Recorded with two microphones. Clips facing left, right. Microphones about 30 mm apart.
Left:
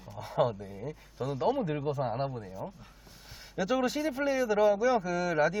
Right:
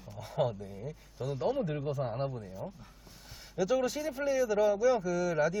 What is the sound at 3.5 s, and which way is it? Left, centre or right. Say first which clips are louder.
Speech: left 1 dB; left.